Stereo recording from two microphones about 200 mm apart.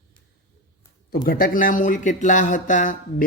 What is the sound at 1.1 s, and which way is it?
Speech, 45° left (ahead or behind).